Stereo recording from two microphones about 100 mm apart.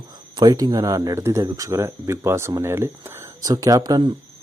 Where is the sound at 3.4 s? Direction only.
35° right (ahead or behind).